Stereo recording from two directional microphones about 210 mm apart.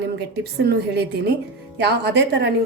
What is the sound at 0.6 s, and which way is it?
A woman's voice, 50° right (ahead or behind).